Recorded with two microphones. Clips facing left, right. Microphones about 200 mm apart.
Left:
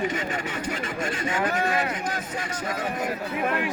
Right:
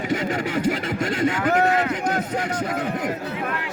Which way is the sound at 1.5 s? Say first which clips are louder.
Right 6 dB; 65° right (ahead or behind).